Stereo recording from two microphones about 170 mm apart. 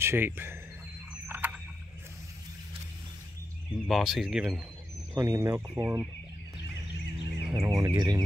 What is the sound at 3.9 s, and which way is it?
Speech, centre (ahead or behind).